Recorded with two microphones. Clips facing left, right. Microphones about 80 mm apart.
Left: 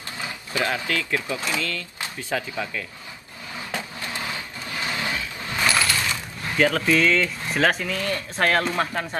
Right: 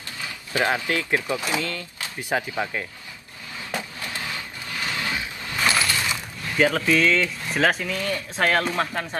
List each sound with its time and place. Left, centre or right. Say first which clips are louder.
0.5 s speech: right 2 dB; right
4.7 s vehicle: left 1 dB; left
5.7 s a sound: even; right
6.6 s speech: even; centre